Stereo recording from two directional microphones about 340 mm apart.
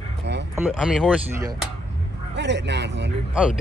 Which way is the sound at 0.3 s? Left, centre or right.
Right.